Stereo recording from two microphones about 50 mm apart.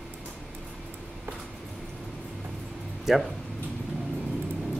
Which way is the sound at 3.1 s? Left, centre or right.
Centre.